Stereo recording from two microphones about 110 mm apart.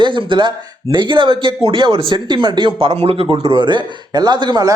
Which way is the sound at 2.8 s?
65° right (ahead or behind).